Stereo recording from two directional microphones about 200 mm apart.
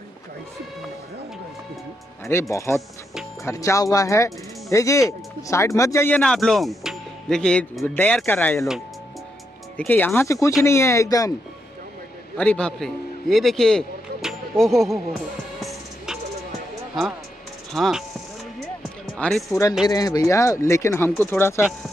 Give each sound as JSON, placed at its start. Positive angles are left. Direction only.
{"t": 2.5, "sound": "speech", "side_deg": 15}
{"t": 9.8, "sound": "speech", "side_deg": 10}
{"t": 12.4, "sound": "a man's voice", "side_deg": 5}
{"t": 17.7, "sound": "speech", "side_deg": 0}
{"t": 19.1, "sound": "speech", "side_deg": 5}
{"t": 19.9, "sound": "speech", "side_deg": 20}